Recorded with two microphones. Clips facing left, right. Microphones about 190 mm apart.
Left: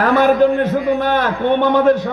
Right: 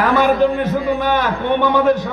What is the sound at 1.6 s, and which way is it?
Speech, 55° left (ahead or behind).